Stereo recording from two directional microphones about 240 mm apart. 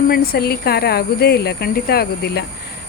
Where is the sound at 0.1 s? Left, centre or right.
Left.